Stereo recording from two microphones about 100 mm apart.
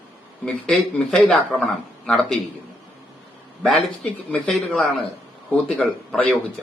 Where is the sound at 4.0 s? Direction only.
10° left (ahead or behind).